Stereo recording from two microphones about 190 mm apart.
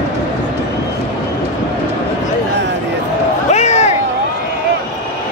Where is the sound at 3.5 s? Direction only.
35° left (ahead or behind).